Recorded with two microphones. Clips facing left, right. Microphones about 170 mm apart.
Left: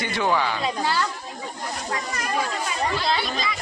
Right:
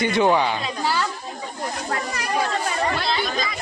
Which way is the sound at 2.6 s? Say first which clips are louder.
Right 1 dB; 50° right (ahead or behind).